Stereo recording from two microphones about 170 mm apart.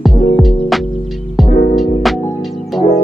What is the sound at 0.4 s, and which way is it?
Music, centre (ahead or behind).